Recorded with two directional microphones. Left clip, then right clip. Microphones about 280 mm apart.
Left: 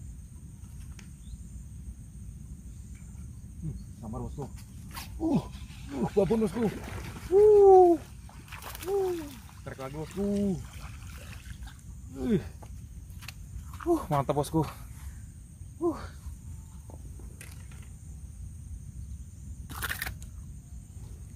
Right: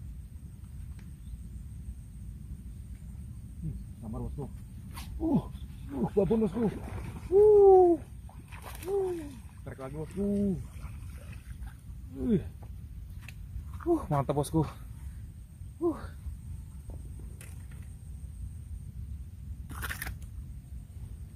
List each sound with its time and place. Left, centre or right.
4.1 s speech: centre
8.5 s splash: centre
9.7 s speech: centre
10.0 s speech: centre
12.2 s speech: left
13.2 s wild animals: centre
15.8 s speech: centre
19.7 s single-lens reflex camera: centre